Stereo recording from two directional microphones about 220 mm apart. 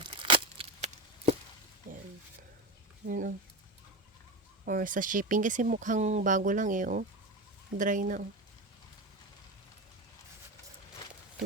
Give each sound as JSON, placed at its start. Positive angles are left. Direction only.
{"t": 0.0, "sound": "a sound", "side_deg": -20}
{"t": 3.1, "sound": "speech", "side_deg": -40}
{"t": 4.6, "sound": "speech", "side_deg": -40}